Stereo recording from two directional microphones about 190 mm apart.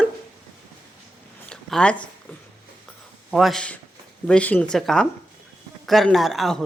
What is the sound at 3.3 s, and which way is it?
A man's voice, centre (ahead or behind).